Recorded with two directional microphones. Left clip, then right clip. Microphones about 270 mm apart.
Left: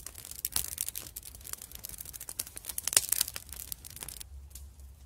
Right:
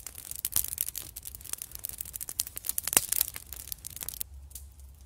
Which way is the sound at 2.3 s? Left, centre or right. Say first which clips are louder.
Right 5 dB; centre.